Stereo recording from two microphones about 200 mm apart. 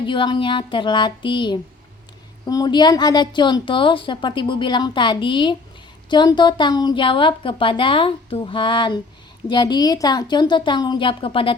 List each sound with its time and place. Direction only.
0.0 s a woman's voice: 25° left (ahead or behind)